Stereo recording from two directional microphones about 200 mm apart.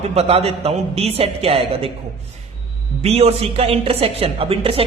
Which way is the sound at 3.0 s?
30° right (ahead or behind).